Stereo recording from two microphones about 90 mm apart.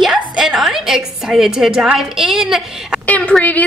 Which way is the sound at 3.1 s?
15° left (ahead or behind).